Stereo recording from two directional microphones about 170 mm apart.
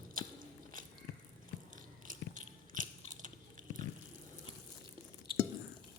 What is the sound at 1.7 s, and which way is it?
Biting, 50° right (ahead or behind).